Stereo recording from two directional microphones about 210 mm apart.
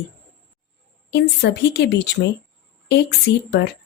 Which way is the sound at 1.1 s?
50° left (ahead or behind).